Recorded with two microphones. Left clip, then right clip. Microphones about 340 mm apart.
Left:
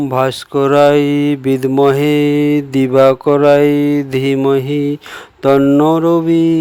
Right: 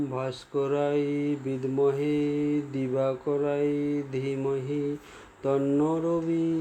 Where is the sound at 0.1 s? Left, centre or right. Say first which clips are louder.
Left 17 dB; left.